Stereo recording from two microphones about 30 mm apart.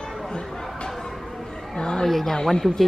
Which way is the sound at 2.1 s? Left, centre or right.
Centre.